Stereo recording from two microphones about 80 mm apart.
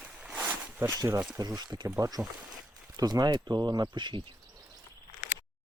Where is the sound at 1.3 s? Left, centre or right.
Right.